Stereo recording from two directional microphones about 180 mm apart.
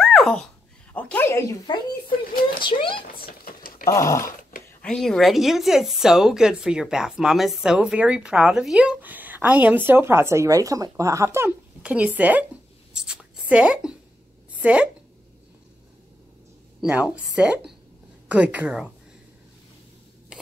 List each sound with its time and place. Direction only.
0.0 s a sound: centre (ahead or behind)
0.9 s speech: 10° left (ahead or behind)
2.6 s speech: 30° left (ahead or behind)
3.4 s typing: 55° left (ahead or behind)
3.8 s speech: 15° left (ahead or behind)
4.4 s a sound: 50° left (ahead or behind)
4.8 s speech: 5° left (ahead or behind)
12.9 s writing: 5° right (ahead or behind)
14.6 s speech: 5° right (ahead or behind)
16.8 s speech: 5° right (ahead or behind)
18.3 s speech: 10° right (ahead or behind)